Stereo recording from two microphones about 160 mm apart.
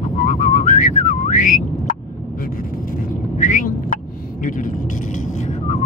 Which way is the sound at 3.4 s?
55° left (ahead or behind).